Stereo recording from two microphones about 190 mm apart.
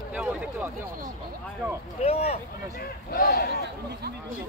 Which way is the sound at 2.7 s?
50° left (ahead or behind).